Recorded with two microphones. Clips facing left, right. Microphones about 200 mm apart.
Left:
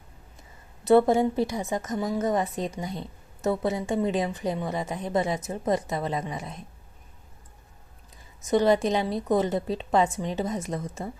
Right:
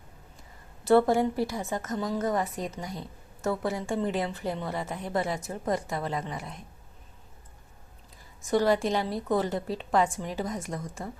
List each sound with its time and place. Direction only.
0.9 s a woman's voice: 20° left (ahead or behind)
8.4 s a woman's voice: 20° left (ahead or behind)